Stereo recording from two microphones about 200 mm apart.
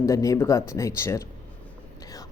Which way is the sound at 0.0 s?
15° left (ahead or behind).